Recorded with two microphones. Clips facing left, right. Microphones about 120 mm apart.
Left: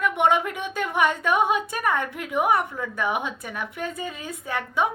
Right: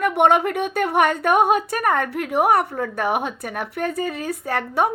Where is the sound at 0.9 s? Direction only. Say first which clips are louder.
Right 4 dB; 60° right (ahead or behind).